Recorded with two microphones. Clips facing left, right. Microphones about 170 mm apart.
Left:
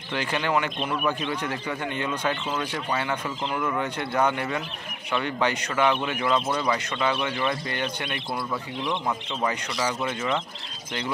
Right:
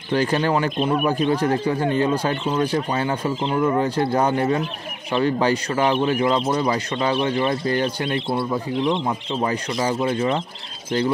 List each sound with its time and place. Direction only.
0.1 s a man's voice: 40° right (ahead or behind)